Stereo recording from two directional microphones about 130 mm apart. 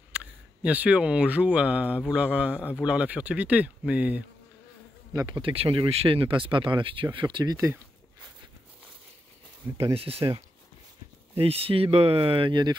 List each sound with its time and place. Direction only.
0.1 s speech: 10° right (ahead or behind)
5.1 s speech: 35° right (ahead or behind)
9.9 s speech: 45° right (ahead or behind)